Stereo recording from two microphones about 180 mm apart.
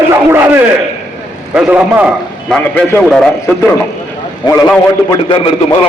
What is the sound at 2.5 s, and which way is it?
A man's voice, 5° left (ahead or behind).